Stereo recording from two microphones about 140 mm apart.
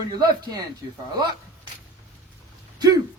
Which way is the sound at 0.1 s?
30° right (ahead or behind).